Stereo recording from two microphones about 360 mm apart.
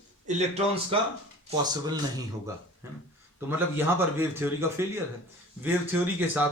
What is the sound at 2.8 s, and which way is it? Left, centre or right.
Speech, centre.